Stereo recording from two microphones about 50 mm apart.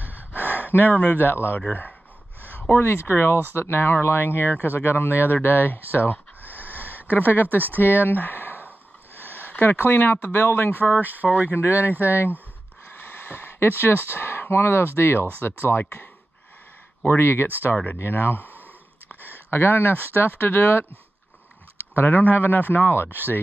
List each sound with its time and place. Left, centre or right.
0.7 s a man's voice: left
1.2 s speech: left
1.7 s a man's voice: left
2.5 s a sound: left
2.8 s a man's voice: left
7.4 s speech: right
7.8 s speech: left
10.8 s speech: right
11.5 s speech: left
11.9 s speech: right
12.9 s a sound: left
14.0 s speech: left
21.9 s a man's voice: left
23.0 s speech: right